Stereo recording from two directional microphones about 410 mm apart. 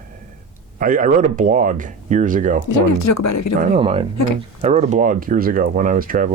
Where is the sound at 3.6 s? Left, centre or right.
Centre.